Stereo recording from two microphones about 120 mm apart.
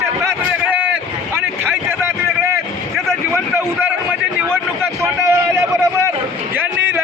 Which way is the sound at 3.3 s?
20° right (ahead or behind).